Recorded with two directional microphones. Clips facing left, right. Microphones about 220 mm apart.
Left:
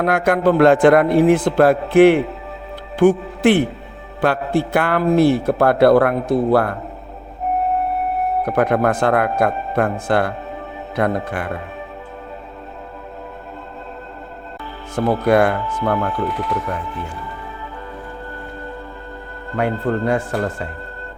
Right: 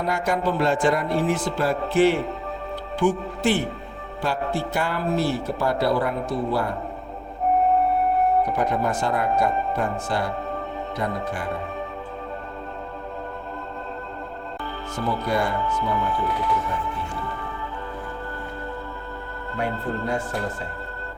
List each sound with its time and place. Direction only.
0.0 s speech: 55° left (ahead or behind)
8.4 s speech: 60° left (ahead or behind)
14.9 s speech: 60° left (ahead or behind)
19.5 s speech: 90° left